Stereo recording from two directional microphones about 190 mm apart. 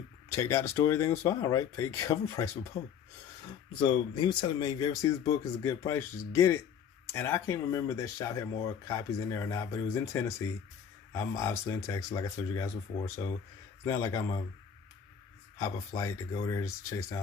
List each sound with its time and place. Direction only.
0.3 s speech: 15° left (ahead or behind)
3.7 s speech: 25° left (ahead or behind)
15.5 s speech: 15° left (ahead or behind)